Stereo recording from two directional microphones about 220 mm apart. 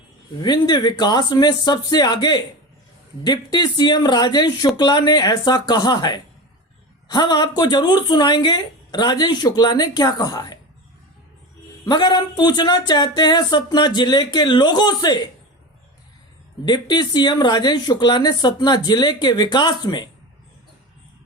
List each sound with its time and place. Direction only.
0.3 s speech: 20° left (ahead or behind)
11.9 s speech: 20° left (ahead or behind)
16.6 s speech: 20° left (ahead or behind)